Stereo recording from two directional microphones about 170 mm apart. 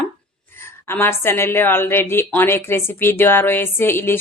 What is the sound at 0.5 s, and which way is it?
A woman's voice, 15° left (ahead or behind).